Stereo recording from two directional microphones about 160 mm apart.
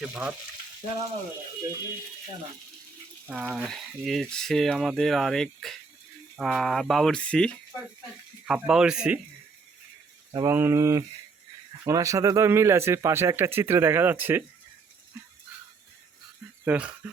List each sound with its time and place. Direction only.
0.0 s speech: 5° right (ahead or behind)
3.2 s speech: 10° right (ahead or behind)
10.3 s a sound: 15° right (ahead or behind)
11.9 s speech: 20° right (ahead or behind)
16.6 s speech: 5° right (ahead or behind)